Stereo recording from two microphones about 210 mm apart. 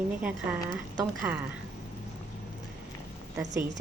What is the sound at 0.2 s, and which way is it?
Speech, 5° right (ahead or behind).